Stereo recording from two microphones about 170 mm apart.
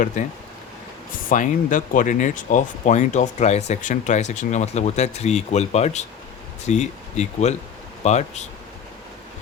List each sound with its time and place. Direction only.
0.2 s speech: 45° left (ahead or behind)